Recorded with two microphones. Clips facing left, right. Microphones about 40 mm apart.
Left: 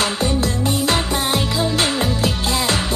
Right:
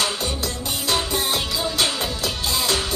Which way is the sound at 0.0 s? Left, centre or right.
Left.